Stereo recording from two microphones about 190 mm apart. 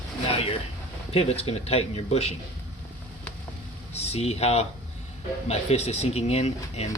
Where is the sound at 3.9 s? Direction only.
35° left (ahead or behind).